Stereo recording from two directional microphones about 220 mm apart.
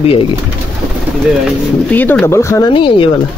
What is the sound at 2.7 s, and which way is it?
Speech, 25° left (ahead or behind).